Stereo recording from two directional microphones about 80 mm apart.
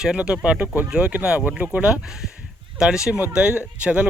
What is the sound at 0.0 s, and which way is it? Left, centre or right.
Speech, centre.